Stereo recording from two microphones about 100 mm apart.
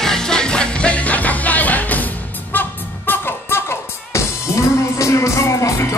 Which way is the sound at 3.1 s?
25° left (ahead or behind).